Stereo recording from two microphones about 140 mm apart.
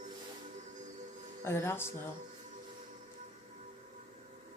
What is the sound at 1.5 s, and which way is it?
Speech, 15° left (ahead or behind).